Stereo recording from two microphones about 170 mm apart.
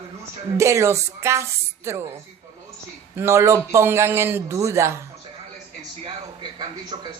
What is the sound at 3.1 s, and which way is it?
Speech, 15° right (ahead or behind).